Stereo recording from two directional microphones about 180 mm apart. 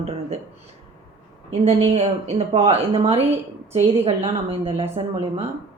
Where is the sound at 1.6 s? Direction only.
35° right (ahead or behind).